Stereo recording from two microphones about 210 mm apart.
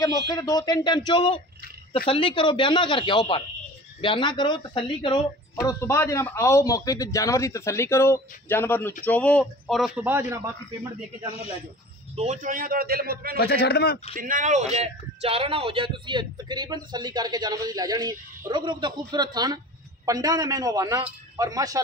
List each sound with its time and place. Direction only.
0.3 s a man's voice: 20° left (ahead or behind); by 10.5 s 10° right (ahead or behind)
12.2 s a man's voice: 35° right (ahead or behind)
13.4 s a man's voice: 50° left (ahead or behind)
14.1 s a man's voice: 40° right (ahead or behind); by 21.8 s 15° right (ahead or behind)